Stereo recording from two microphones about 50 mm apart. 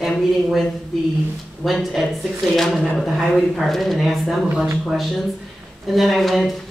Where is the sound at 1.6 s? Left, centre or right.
Centre.